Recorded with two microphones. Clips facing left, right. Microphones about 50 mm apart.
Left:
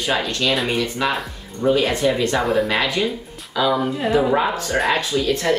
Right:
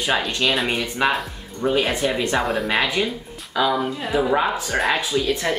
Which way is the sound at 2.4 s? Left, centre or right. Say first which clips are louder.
Left 2 dB; centre.